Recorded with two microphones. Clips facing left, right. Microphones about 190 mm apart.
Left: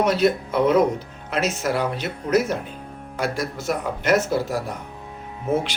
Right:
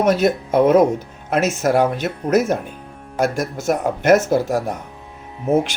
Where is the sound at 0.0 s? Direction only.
50° right (ahead or behind).